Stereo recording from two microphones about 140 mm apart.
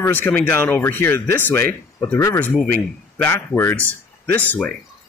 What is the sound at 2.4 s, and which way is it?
Speech, 10° left (ahead or behind).